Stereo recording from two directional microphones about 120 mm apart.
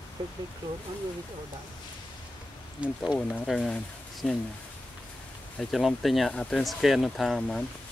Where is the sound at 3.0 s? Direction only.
5° right (ahead or behind).